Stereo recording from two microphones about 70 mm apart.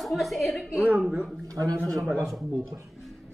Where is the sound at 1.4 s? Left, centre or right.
Right.